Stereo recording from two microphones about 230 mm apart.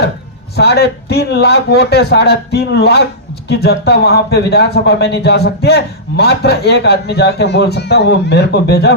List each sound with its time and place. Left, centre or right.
0.5 s speech: left